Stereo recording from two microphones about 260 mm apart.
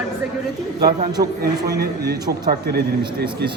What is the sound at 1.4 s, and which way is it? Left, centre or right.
A man's voice, right.